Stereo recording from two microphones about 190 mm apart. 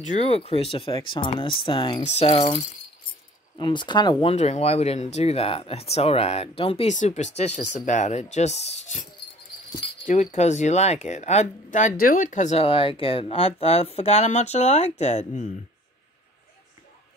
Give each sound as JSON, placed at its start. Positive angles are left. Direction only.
{"t": 0.0, "sound": "speech", "side_deg": 35}
{"t": 10.3, "sound": "speech", "side_deg": 40}